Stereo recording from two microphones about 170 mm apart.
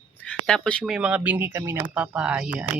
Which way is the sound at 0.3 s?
5° left (ahead or behind).